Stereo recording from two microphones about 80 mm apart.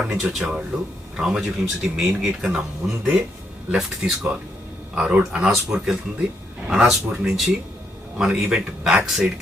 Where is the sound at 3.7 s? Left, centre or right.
Centre.